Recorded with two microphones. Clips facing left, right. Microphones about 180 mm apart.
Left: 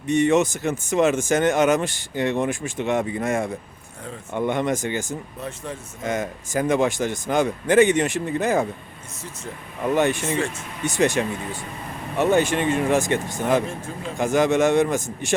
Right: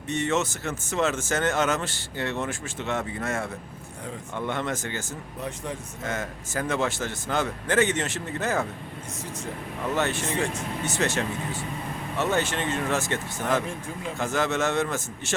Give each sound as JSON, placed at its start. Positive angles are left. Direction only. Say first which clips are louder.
{"t": 0.1, "sound": "speech", "louder": "left 8 dB", "side_deg": 15}
{"t": 5.4, "sound": "speech", "louder": "left 1 dB", "side_deg": -15}
{"t": 6.0, "sound": "speech", "louder": "left 8 dB", "side_deg": 15}
{"t": 9.9, "sound": "speech", "louder": "left 6 dB", "side_deg": 15}